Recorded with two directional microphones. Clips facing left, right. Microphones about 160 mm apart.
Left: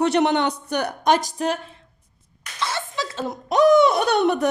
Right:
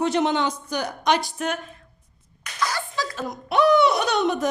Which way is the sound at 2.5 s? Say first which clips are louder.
Even; 25° left (ahead or behind).